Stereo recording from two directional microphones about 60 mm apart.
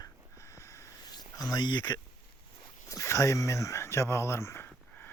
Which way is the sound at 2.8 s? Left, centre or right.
Left.